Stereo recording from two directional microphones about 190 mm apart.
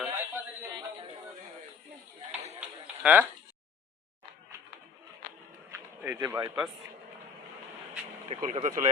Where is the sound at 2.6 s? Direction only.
5° right (ahead or behind).